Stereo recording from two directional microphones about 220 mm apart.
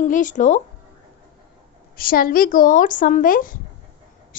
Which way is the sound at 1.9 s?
40° left (ahead or behind).